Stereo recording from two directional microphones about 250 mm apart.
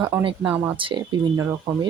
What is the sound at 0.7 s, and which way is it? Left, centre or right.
Speech, centre.